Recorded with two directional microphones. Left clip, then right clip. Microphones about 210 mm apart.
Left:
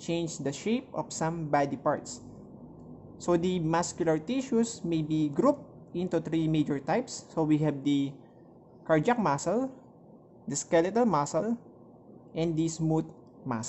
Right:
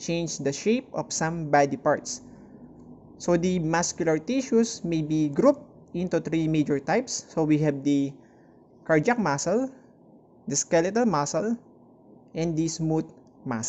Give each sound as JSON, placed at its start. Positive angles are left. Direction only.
{"t": 0.0, "sound": "speech", "side_deg": -15}
{"t": 12.4, "sound": "speech", "side_deg": -10}